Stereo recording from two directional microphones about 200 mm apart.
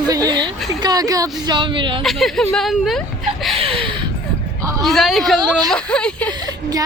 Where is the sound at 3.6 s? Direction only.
25° right (ahead or behind).